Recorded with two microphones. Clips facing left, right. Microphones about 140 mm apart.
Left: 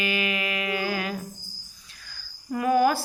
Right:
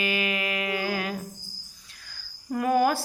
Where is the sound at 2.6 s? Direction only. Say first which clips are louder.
Left 1 dB; 45° right (ahead or behind).